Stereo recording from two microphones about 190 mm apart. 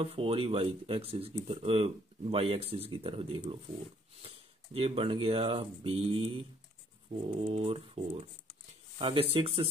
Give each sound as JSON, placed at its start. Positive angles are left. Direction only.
{"t": 0.0, "sound": "speech", "side_deg": -30}
{"t": 4.7, "sound": "speech", "side_deg": -30}